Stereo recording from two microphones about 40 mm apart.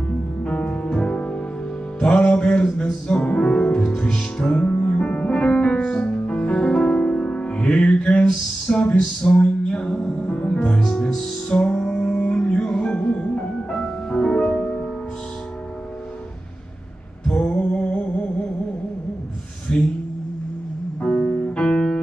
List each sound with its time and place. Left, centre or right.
0.4 s music: left
0.8 s music: left
4.6 s music: left
8.9 s music: centre
9.4 s a sound: left
10.0 s music: centre
10.3 s music: left
10.8 s music: centre
11.7 s music: left
17.3 s a sound: left
19.7 s mantra: left
21.0 s music: left
21.5 s music: left